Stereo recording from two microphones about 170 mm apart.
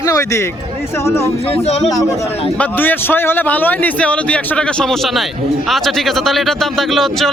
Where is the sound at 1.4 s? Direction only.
35° left (ahead or behind).